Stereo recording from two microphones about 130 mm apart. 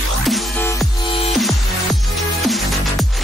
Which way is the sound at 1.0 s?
45° left (ahead or behind).